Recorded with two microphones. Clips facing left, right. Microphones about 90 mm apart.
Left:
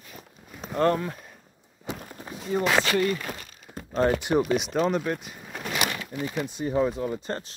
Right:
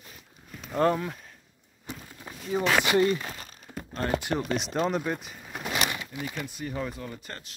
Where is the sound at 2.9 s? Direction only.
25° right (ahead or behind).